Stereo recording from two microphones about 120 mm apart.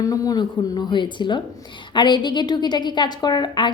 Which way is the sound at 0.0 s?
30° left (ahead or behind).